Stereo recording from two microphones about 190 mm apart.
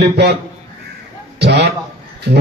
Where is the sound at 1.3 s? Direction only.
60° right (ahead or behind).